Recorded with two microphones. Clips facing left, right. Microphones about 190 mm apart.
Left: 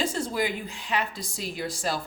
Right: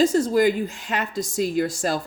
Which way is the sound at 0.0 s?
40° right (ahead or behind).